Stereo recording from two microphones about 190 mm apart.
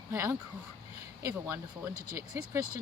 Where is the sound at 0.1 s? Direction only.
15° right (ahead or behind).